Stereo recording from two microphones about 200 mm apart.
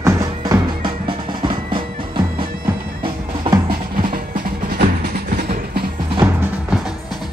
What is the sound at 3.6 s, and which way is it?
Music, 45° right (ahead or behind).